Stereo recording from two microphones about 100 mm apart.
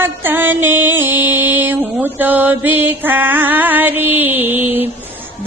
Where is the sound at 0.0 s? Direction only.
20° right (ahead or behind).